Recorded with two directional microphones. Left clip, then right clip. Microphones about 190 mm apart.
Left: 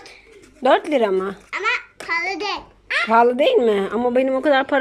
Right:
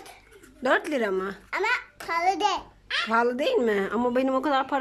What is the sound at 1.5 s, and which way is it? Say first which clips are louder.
A child's voice: left 3 dB; 25° right (ahead or behind).